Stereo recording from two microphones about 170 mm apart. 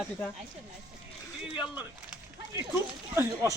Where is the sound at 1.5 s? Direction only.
5° right (ahead or behind).